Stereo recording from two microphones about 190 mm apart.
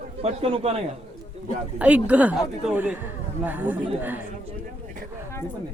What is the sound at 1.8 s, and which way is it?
Speech, 5° right (ahead or behind).